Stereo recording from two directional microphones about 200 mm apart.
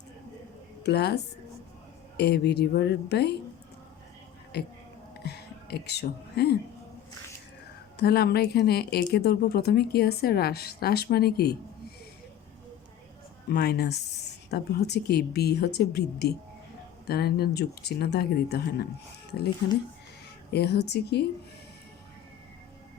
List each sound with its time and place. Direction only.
0.9 s speech: 55° left (ahead or behind)
4.5 s speech: 55° left (ahead or behind)
7.9 s a woman's voice: 55° left (ahead or behind)
13.5 s a woman's voice: 50° left (ahead or behind)
20.5 s speech: 55° left (ahead or behind)